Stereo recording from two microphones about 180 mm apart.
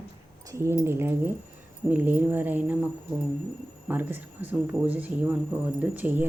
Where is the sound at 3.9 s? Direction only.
10° right (ahead or behind).